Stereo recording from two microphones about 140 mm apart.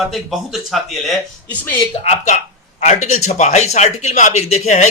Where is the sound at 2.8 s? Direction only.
55° left (ahead or behind).